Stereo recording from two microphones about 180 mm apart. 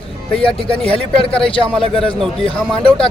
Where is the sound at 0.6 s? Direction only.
30° left (ahead or behind).